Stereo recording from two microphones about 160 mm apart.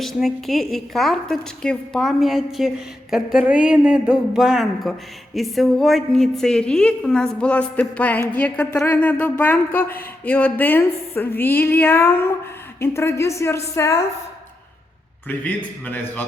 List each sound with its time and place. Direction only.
0.0 s speech: centre (ahead or behind); by 14.1 s 20° left (ahead or behind)
15.3 s speech: 10° left (ahead or behind)